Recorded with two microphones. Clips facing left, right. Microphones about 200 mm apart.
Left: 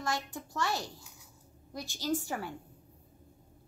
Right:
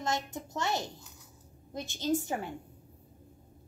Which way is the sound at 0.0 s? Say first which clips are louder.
Right 2 dB; 20° right (ahead or behind).